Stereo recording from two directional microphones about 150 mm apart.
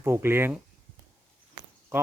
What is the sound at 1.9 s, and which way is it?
Speech, 15° right (ahead or behind).